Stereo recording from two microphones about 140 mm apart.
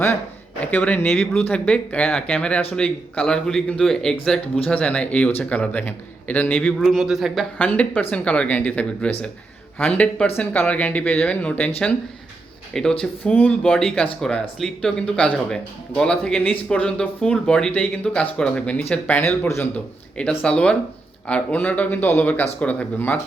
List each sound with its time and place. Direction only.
0.6 s speech: 10° left (ahead or behind)
6.7 s speech: centre (ahead or behind)
7.6 s speech: 10° left (ahead or behind)
12.7 s speech: 5° left (ahead or behind)